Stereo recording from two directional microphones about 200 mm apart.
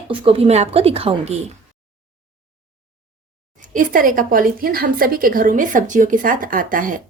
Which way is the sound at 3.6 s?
40° right (ahead or behind).